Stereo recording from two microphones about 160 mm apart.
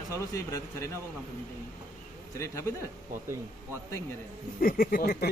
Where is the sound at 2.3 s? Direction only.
20° left (ahead or behind).